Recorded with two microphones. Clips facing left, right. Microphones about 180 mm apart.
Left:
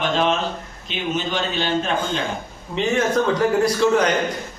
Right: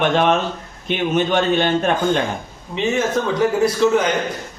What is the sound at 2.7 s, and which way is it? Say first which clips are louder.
A man's voice: even; centre (ahead or behind).